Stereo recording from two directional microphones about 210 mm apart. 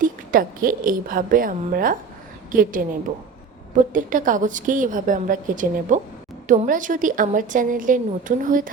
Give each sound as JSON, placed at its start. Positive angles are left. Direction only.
{"t": 0.0, "sound": "a woman's voice", "side_deg": -40}
{"t": 3.9, "sound": "a woman's voice", "side_deg": -40}